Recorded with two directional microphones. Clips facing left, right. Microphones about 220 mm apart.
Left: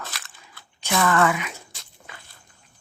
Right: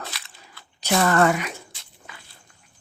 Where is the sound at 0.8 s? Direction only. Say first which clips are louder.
Right 2 dB; 40° right (ahead or behind).